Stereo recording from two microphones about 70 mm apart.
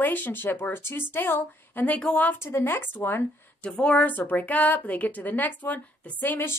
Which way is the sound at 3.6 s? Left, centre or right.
Centre.